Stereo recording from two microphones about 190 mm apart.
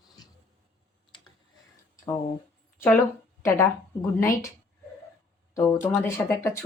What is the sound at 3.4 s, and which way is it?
Speech, 15° left (ahead or behind).